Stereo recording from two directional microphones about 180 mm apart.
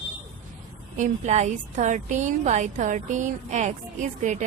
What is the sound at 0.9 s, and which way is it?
A woman's voice, 40° right (ahead or behind).